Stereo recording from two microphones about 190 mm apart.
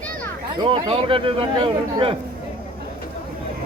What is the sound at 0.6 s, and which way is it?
A man's voice, 25° right (ahead or behind).